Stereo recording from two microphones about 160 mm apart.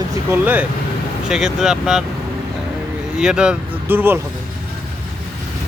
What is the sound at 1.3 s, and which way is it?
Speech, 5° right (ahead or behind).